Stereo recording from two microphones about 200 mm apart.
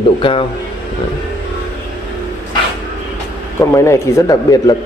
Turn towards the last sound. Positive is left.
turn(degrees=15)  # may be behind; listen again after turning